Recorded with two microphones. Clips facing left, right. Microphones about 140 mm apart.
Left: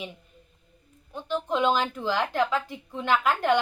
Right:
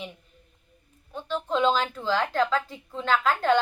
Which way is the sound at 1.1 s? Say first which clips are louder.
Even; 15° left (ahead or behind).